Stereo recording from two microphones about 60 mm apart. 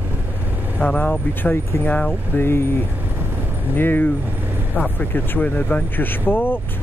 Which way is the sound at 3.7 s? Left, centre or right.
Left.